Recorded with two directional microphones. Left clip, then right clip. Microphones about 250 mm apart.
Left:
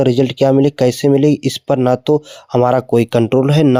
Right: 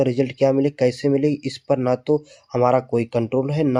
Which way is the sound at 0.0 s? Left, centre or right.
Left.